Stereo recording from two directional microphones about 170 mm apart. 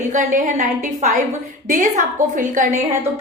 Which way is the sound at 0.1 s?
50° right (ahead or behind).